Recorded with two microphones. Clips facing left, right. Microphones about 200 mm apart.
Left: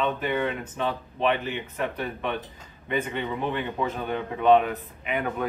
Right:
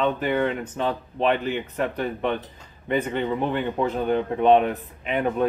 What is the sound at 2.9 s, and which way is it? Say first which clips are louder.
Speech: right 4 dB; 35° right (ahead or behind).